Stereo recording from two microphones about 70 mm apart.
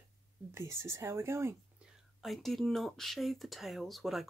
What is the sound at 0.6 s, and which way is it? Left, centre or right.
Speech, right.